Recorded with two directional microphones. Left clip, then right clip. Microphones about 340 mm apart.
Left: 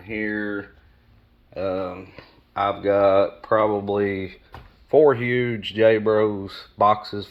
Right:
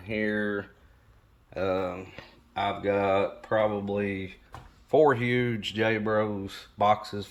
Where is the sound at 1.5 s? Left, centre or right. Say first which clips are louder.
Left 2 dB; centre.